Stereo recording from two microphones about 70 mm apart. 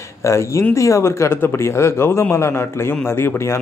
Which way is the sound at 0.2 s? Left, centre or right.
Left.